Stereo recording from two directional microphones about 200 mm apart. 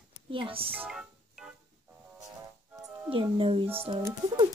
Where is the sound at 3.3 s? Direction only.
25° right (ahead or behind).